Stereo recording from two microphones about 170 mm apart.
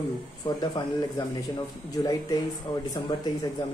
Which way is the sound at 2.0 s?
20° left (ahead or behind).